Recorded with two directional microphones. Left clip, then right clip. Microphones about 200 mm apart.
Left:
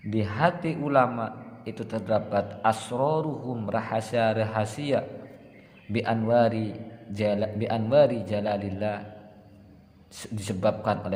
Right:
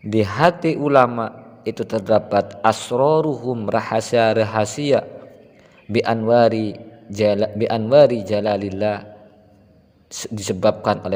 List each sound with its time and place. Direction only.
0.1 s a man's voice: 50° right (ahead or behind)
10.1 s a man's voice: 45° right (ahead or behind)